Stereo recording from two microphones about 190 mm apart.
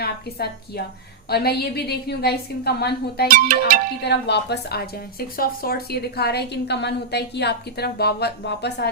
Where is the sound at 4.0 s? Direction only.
60° left (ahead or behind).